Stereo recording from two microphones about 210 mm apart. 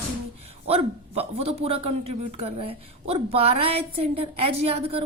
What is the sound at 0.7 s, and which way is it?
A man's voice, 30° right (ahead or behind).